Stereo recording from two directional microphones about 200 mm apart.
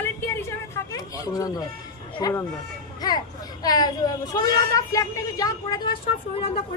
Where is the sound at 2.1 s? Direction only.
15° left (ahead or behind).